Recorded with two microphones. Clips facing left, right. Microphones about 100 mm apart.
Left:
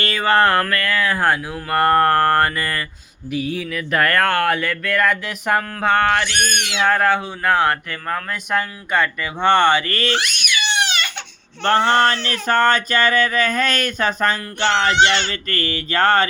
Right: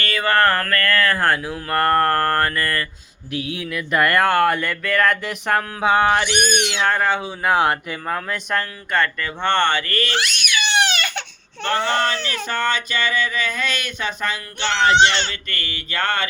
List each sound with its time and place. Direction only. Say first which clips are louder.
0.0 s speech: left 2 dB; 25° left (ahead or behind)
3.3 s speech: left 3 dB; centre (ahead or behind)
6.1 s speech: right 1 dB; 15° right (ahead or behind)
6.8 s speech: left 5 dB; 5° left (ahead or behind)
7.4 s speech: even; 15° right (ahead or behind)
8.3 s speech: left 2 dB; 10° left (ahead or behind); by 10.2 s 25° left (ahead or behind)
10.4 s crying: right 1 dB; 45° right (ahead or behind)
11.6 s a sound: left 5 dB; 50° left (ahead or behind)
14.9 s speech: even; 25° right (ahead or behind)
15.4 s speech: left 6 dB; 40° left (ahead or behind)